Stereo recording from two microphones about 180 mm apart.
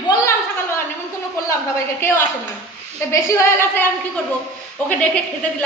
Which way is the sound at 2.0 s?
15° left (ahead or behind).